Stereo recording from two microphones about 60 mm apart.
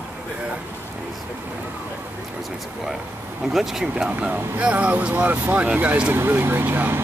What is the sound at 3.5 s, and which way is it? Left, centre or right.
Speech, centre.